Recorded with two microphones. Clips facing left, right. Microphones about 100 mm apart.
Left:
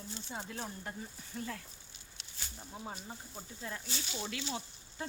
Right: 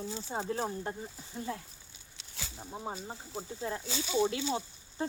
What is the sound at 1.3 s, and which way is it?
Speech, 25° right (ahead or behind).